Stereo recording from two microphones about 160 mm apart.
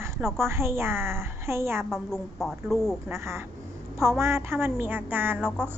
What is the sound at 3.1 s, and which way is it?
A woman's voice, 15° right (ahead or behind).